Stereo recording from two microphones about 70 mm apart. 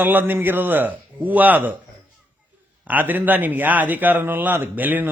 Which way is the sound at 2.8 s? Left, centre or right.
Right.